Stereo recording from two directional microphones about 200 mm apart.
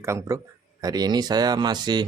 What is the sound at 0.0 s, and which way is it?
A man's voice, 15° right (ahead or behind).